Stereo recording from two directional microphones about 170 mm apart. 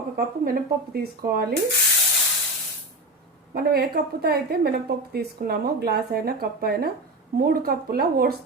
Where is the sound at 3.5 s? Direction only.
65° right (ahead or behind).